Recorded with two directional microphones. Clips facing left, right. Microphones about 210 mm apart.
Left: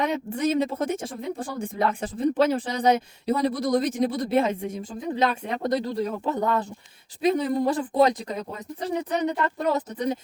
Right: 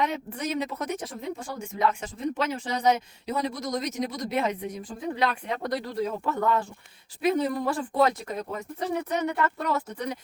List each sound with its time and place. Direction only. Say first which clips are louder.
0.3 s speech: left 6 dB; 30° left (ahead or behind)